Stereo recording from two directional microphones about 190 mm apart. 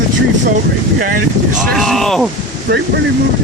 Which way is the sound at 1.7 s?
Centre (ahead or behind).